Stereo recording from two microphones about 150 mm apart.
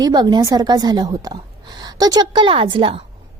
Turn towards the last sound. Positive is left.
turn(degrees=-35)  # may be behind; listen again after turning